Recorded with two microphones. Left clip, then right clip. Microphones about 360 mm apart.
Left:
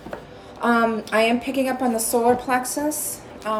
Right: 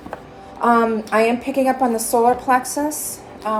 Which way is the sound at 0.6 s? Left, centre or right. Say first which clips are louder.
Right 4 dB; centre.